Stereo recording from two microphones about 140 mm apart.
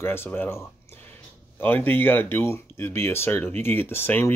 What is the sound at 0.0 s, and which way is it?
Speech, 15° left (ahead or behind).